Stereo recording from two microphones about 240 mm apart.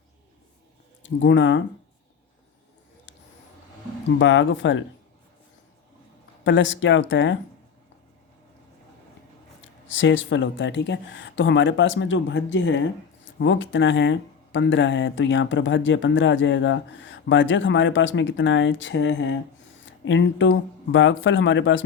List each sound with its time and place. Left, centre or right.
1.0 s speech: left
4.2 s speech: left
6.4 s speech: left
9.6 s speech: left